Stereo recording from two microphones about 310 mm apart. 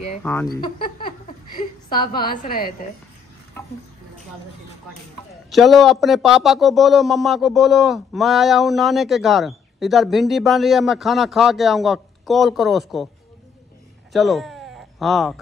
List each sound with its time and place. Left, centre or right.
0.2 s speech: centre
2.4 s a woman's voice: left
5.3 s a man's voice: centre
14.1 s a sound: centre